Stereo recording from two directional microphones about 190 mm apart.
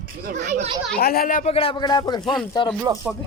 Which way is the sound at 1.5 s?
30° left (ahead or behind).